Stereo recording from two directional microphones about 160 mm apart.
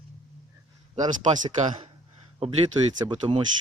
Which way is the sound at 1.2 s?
50° right (ahead or behind).